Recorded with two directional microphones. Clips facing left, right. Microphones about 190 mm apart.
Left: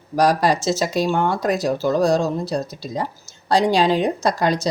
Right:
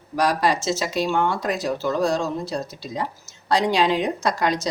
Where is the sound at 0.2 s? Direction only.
40° left (ahead or behind).